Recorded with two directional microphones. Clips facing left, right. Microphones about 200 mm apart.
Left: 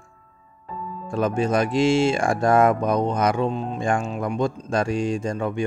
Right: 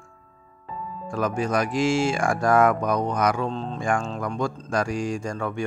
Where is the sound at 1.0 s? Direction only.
25° left (ahead or behind).